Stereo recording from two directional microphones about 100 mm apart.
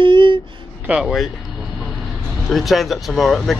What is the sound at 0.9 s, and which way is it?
Speech, centre (ahead or behind).